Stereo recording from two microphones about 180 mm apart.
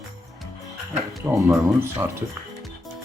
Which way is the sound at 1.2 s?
20° right (ahead or behind).